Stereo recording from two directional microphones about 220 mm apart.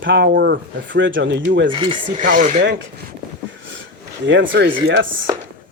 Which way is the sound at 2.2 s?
35° right (ahead or behind).